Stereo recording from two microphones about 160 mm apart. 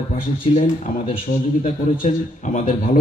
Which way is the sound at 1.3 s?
60° left (ahead or behind).